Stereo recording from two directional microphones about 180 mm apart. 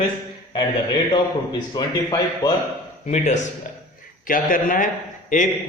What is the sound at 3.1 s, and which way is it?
A man's voice, 40° left (ahead or behind).